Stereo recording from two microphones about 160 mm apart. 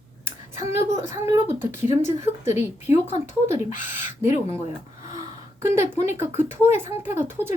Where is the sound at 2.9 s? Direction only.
50° left (ahead or behind).